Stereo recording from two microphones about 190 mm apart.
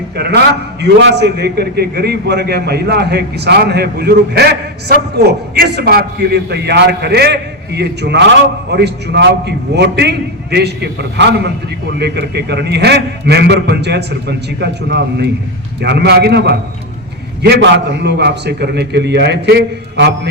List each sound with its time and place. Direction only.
0.2 s a man's voice: 60° right (ahead or behind)